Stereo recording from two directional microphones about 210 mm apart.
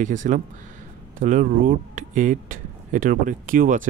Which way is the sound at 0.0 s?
35° right (ahead or behind).